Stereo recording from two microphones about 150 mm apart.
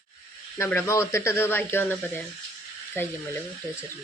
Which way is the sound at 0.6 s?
15° left (ahead or behind).